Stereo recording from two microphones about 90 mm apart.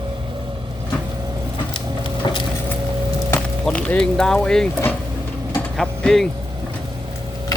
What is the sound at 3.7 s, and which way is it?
Speech, 15° left (ahead or behind).